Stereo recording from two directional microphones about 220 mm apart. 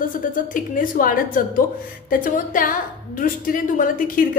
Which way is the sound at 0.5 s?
40° left (ahead or behind).